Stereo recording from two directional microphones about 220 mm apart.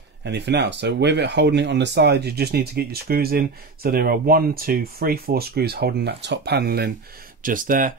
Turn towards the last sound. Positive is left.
turn(degrees=-40)  # may be behind; listen again after turning